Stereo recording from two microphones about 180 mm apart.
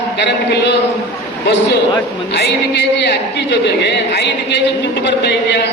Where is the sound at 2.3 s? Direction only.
70° left (ahead or behind).